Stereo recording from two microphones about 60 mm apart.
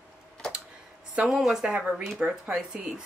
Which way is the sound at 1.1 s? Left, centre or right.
Centre.